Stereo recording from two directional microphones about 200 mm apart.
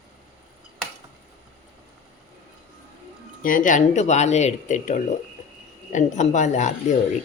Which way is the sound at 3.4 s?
40° left (ahead or behind).